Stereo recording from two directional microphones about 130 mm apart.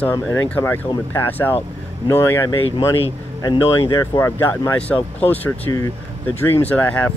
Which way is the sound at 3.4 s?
35° left (ahead or behind).